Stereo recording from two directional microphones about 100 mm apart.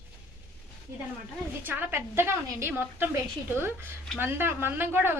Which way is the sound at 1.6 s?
20° right (ahead or behind).